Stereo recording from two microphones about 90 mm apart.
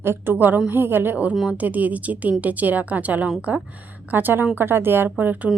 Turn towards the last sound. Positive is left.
turn(degrees=-20)  # may be behind; listen again after turning